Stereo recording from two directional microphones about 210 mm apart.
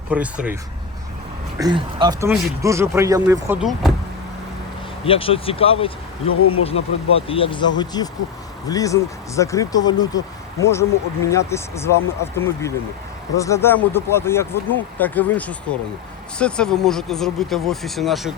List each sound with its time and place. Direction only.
0.1 s speech: 5° right (ahead or behind)
1.5 s speech: 20° right (ahead or behind); by 3.9 s centre (ahead or behind)
5.0 s speech: 25° left (ahead or behind); by 18.3 s centre (ahead or behind)